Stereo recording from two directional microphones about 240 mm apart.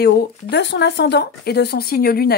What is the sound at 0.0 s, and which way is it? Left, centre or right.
Speech, left.